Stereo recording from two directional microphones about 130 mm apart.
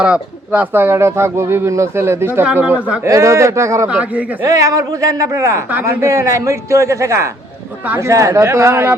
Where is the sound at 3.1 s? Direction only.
25° right (ahead or behind).